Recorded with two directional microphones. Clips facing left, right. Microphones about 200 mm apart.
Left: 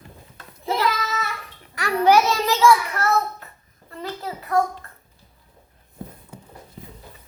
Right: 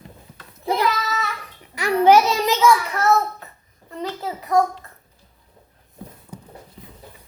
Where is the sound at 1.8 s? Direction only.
20° right (ahead or behind).